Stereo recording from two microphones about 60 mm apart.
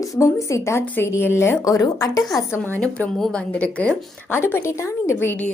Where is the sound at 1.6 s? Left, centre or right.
Left.